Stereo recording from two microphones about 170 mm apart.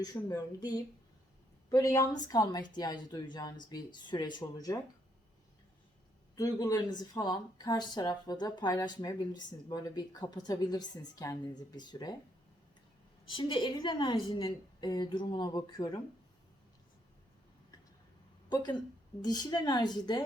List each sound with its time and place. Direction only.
0.0 s speech: 25° left (ahead or behind)
6.3 s speech: 20° left (ahead or behind)
13.3 s speech: 30° left (ahead or behind)
18.4 s speech: 25° left (ahead or behind)